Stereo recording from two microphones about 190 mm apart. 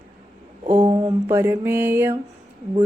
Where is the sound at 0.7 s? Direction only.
25° right (ahead or behind).